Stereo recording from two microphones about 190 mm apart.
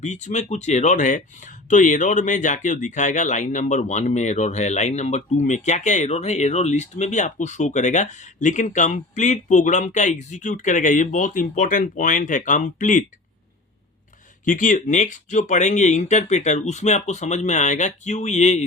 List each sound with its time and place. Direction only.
0.0 s speech: 40° left (ahead or behind)
14.4 s speech: 40° left (ahead or behind)